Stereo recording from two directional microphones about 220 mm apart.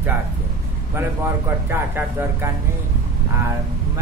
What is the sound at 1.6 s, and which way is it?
Speech, 10° right (ahead or behind).